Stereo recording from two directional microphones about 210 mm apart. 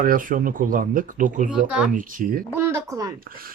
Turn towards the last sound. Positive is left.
turn(degrees=-45)  # may be behind; listen again after turning